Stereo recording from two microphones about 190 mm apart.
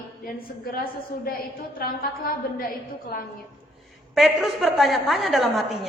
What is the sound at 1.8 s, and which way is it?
Speech, 50° left (ahead or behind).